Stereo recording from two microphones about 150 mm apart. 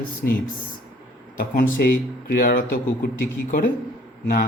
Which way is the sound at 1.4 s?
65° left (ahead or behind).